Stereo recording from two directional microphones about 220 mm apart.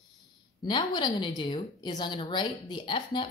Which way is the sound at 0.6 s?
20° left (ahead or behind).